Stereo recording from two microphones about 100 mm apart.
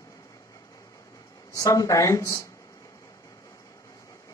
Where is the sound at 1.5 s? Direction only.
35° left (ahead or behind).